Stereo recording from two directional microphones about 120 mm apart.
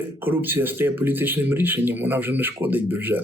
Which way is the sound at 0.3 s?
15° right (ahead or behind).